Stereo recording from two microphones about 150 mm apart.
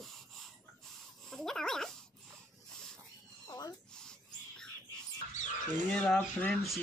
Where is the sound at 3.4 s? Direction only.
25° left (ahead or behind).